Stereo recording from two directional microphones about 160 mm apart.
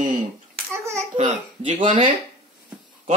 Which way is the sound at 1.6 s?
35° right (ahead or behind).